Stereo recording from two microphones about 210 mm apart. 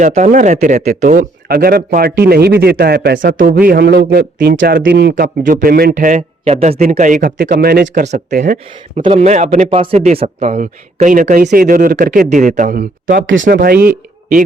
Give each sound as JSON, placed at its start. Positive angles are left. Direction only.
{"t": 0.0, "sound": "a man's voice", "side_deg": -35}
{"t": 9.0, "sound": "speech", "side_deg": -30}
{"t": 13.2, "sound": "speech", "side_deg": -65}
{"t": 13.6, "sound": "speech", "side_deg": -45}